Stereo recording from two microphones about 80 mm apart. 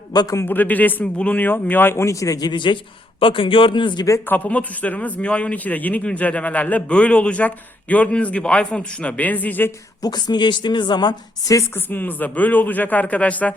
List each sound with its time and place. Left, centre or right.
0.1 s a man's voice: left
0.4 s a man's voice: left
2.5 s a man's voice: left
4.3 s a man's voice: centre
10.0 s speech: left
11.7 s a man's voice: left